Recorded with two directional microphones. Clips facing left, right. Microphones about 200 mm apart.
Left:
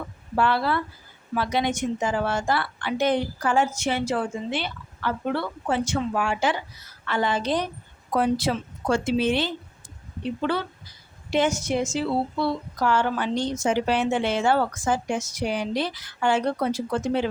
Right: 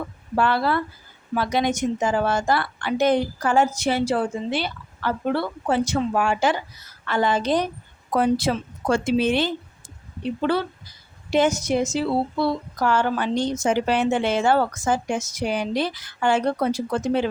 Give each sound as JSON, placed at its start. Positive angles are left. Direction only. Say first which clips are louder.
{"t": 0.3, "sound": "a woman's voice", "louder": "right 2 dB", "side_deg": -45}